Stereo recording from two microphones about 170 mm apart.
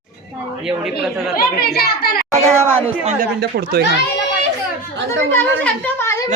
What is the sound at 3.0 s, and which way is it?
Speech, 45° right (ahead or behind).